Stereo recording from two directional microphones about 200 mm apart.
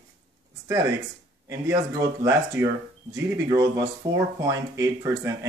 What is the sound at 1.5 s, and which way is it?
Speech, 15° right (ahead or behind).